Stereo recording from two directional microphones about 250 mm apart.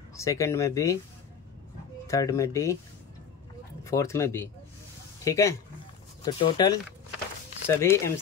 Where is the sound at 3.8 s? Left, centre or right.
Centre.